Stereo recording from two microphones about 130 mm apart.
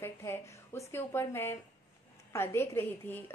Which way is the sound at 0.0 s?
20° left (ahead or behind).